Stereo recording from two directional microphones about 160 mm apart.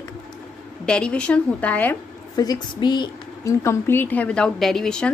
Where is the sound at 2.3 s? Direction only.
25° left (ahead or behind).